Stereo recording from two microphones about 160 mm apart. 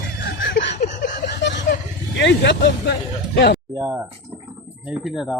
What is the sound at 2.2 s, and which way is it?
Speech, 90° left.